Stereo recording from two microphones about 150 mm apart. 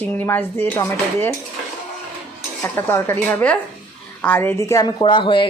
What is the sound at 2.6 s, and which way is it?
A woman's voice, 15° left (ahead or behind).